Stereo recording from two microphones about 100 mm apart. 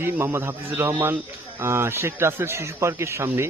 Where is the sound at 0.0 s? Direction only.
25° right (ahead or behind).